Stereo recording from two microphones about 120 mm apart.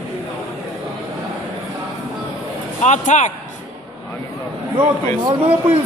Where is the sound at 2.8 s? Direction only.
80° left.